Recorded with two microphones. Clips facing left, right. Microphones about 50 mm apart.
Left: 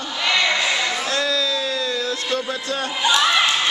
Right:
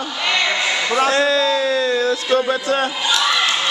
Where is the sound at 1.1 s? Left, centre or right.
Right.